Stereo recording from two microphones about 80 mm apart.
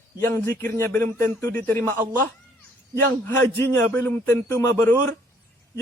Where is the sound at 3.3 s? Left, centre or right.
Left.